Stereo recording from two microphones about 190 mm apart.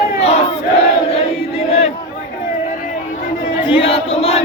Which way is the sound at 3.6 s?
30° left (ahead or behind).